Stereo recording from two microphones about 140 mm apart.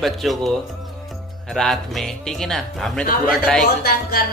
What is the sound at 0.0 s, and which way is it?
Speech, centre (ahead or behind).